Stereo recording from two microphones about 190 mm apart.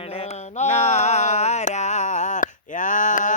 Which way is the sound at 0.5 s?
35° left (ahead or behind).